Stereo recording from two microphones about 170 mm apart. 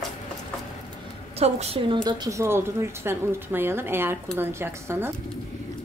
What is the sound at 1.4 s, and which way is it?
Speech, 35° right (ahead or behind).